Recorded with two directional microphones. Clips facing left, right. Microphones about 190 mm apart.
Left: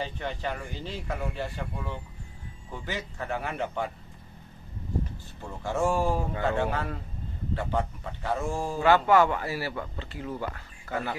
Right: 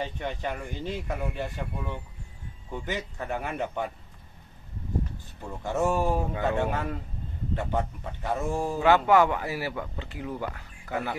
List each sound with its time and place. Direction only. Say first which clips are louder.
0.2 s speech: right 1 dB; 15° right (ahead or behind)
5.4 s a man's voice: right 1 dB; 15° right (ahead or behind)